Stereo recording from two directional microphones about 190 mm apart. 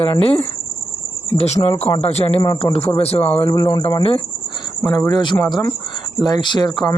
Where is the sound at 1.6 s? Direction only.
20° left (ahead or behind).